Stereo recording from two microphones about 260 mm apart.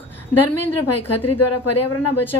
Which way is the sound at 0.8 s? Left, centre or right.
Left.